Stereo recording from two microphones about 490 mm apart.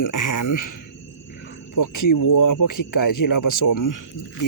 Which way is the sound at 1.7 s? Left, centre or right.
Left.